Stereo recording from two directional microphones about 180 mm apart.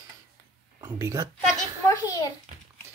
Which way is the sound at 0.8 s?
20° right (ahead or behind).